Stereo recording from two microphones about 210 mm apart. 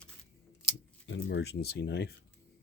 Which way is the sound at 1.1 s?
55° left (ahead or behind).